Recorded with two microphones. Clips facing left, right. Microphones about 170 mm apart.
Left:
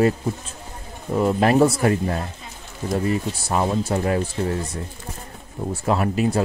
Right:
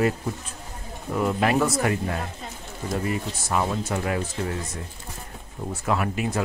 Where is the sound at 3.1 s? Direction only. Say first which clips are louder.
Left 4 dB; 30° left (ahead or behind).